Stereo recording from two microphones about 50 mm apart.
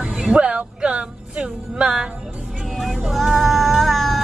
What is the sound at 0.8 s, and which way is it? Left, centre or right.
Music, right.